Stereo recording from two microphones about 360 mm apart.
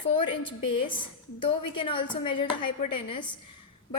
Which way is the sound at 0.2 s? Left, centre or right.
Centre.